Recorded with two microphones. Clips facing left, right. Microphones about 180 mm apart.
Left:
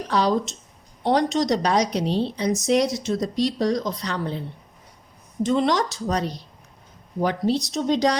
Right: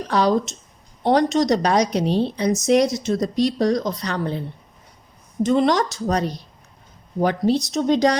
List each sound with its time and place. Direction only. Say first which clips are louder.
0.1 s a woman's voice: right 3 dB; 50° right (ahead or behind)
5.4 s a woman's voice: right 3 dB; 50° right (ahead or behind)